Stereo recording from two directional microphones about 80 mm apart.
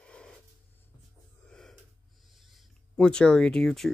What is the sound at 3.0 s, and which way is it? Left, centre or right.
Speech, centre.